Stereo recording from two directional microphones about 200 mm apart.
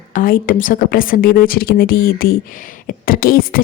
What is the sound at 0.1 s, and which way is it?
A woman's voice, 45° left (ahead or behind).